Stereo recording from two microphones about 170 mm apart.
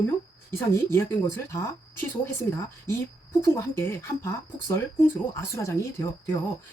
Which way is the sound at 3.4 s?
15° left (ahead or behind).